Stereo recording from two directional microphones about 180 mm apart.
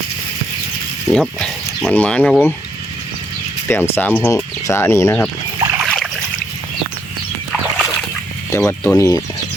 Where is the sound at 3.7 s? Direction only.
15° left (ahead or behind).